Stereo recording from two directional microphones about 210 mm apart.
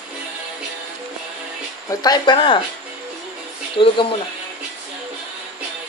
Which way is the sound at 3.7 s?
25° left (ahead or behind).